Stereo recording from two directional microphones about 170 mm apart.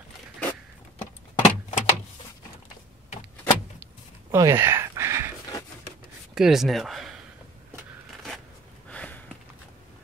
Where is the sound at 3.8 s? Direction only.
15° right (ahead or behind).